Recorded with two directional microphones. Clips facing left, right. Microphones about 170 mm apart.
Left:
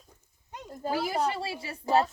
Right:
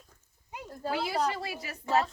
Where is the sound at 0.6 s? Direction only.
10° left (ahead or behind).